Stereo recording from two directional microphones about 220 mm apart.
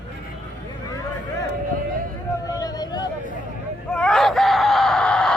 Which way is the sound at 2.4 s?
15° left (ahead or behind).